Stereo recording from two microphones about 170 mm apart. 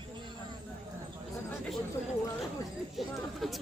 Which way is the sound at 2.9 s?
Centre (ahead or behind).